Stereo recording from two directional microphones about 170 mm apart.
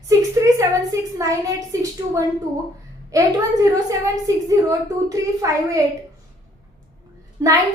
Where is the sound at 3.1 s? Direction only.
20° right (ahead or behind).